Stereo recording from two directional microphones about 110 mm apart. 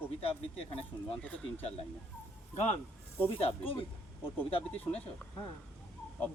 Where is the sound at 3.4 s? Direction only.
60° left (ahead or behind).